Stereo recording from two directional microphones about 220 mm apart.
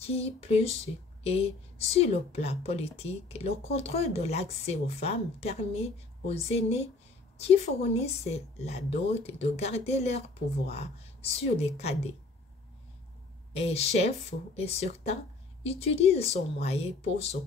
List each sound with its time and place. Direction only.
0.0 s a woman's voice: 25° left (ahead or behind)
13.5 s a woman's voice: 30° left (ahead or behind)